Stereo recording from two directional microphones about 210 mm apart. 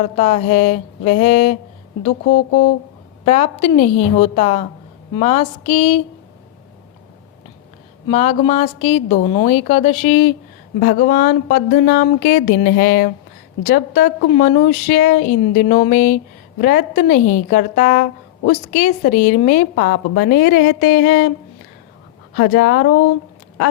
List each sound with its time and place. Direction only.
0.0 s a woman's voice: 35° left (ahead or behind)
5.1 s a sound: 30° left (ahead or behind)
8.0 s a woman's voice: 30° left (ahead or behind)
10.8 s a woman's voice: 45° left (ahead or behind)
22.4 s a woman's voice: 50° left (ahead or behind)